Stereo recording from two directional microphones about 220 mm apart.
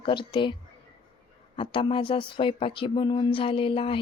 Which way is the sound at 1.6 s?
25° left (ahead or behind).